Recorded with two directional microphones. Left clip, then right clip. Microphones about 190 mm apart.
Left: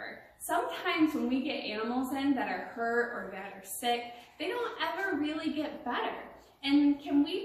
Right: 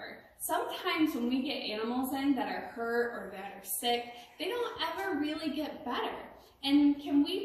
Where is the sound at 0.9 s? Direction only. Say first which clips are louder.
Even; 10° left (ahead or behind).